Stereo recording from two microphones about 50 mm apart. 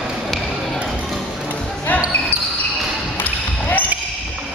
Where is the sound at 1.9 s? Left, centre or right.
Left.